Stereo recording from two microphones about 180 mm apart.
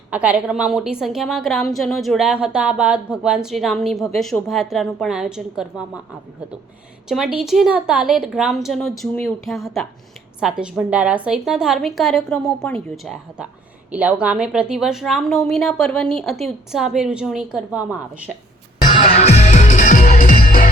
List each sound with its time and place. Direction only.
0.1 s a woman's voice: 5° right (ahead or behind)
7.1 s a woman's voice: 5° right (ahead or behind)
19.1 s music: 35° left (ahead or behind); by 20.7 s 50° left (ahead or behind)